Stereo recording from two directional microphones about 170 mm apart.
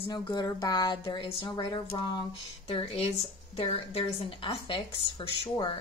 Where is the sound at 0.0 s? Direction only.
25° left (ahead or behind).